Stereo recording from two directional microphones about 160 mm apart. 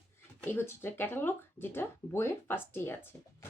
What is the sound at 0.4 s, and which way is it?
Speech, 15° left (ahead or behind).